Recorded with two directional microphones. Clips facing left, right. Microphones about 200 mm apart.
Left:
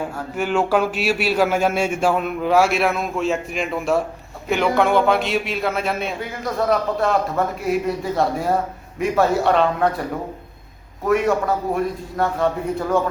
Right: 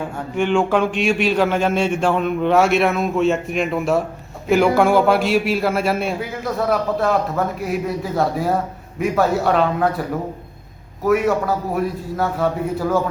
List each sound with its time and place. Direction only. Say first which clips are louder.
0.0 s a man's voice: right 3 dB; 5° left (ahead or behind)
11.0 s a man's voice: right 1 dB; 5° right (ahead or behind)